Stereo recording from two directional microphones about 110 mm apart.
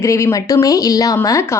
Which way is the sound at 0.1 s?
30° left (ahead or behind).